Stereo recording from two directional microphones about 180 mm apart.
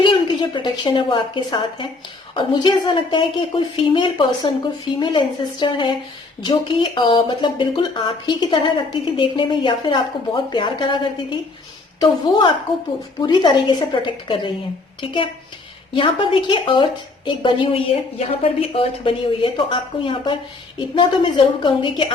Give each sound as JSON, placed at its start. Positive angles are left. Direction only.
{"t": 0.0, "sound": "a woman's voice", "side_deg": 25}
{"t": 16.0, "sound": "a woman's voice", "side_deg": 30}